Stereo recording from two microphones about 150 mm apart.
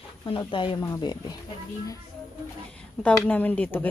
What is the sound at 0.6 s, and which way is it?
Speech, 35° left (ahead or behind).